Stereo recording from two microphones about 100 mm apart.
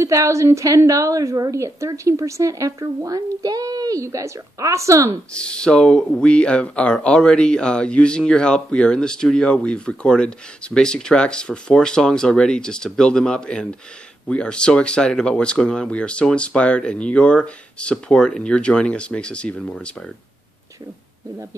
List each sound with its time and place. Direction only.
0.0 s a woman's voice: 30° right (ahead or behind)
5.3 s speech: 10° left (ahead or behind)